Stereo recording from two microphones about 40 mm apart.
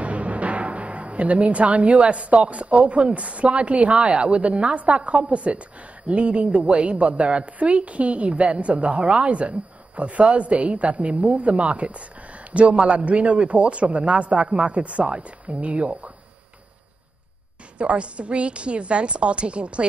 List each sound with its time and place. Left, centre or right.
0.0 s a woman's voice: right
17.7 s a woman's voice: right